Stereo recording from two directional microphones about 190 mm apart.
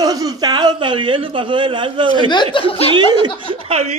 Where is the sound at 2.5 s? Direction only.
30° left (ahead or behind).